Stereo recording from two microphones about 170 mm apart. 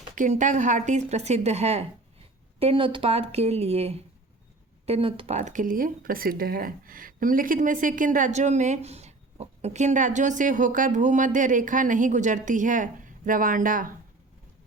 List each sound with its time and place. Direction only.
0.2 s speech: 45° right (ahead or behind)